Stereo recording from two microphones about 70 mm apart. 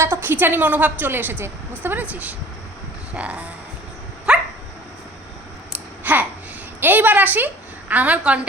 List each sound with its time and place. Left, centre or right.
0.0 s a woman's voice: right; by 3.4 s centre
4.3 s dog: centre
5.7 s babbling: right
6.7 s a woman's voice: right